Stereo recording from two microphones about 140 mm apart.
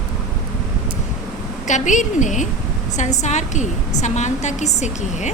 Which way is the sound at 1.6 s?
60° left (ahead or behind).